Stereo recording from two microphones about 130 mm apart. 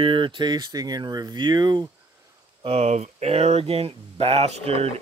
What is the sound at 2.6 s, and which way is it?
Speech, 55° right (ahead or behind).